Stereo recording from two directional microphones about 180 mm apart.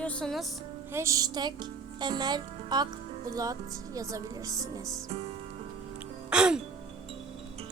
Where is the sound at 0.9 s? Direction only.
15° right (ahead or behind).